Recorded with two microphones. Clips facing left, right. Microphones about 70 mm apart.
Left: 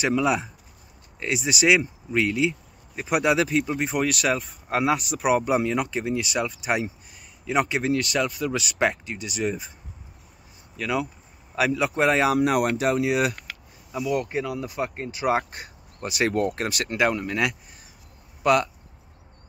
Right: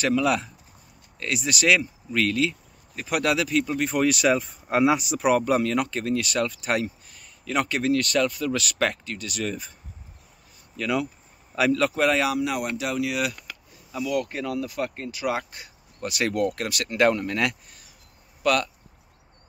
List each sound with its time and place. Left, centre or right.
0.2 s speech: centre
1.2 s speech: centre
3.9 s speech: centre
10.8 s speech: centre
12.0 s speech: left
12.4 s speech: left
14.3 s speech: centre
14.6 s speech: left
16.9 s speech: centre
18.4 s speech: left